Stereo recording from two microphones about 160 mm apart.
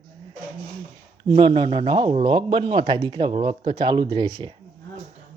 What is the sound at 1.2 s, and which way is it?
Speech, 30° right (ahead or behind).